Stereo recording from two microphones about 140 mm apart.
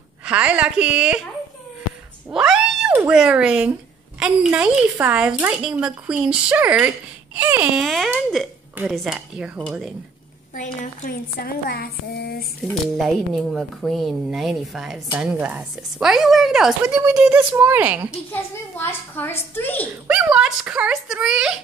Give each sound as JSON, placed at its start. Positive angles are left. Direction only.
{"t": 0.2, "sound": "speech", "side_deg": -10}
{"t": 2.3, "sound": "cat", "side_deg": -5}
{"t": 3.1, "sound": "speech", "side_deg": -5}
{"t": 10.5, "sound": "a woman's voice", "side_deg": 65}
{"t": 12.8, "sound": "speech", "side_deg": 0}
{"t": 18.3, "sound": "a woman's voice", "side_deg": 15}
{"t": 20.1, "sound": "speech", "side_deg": -5}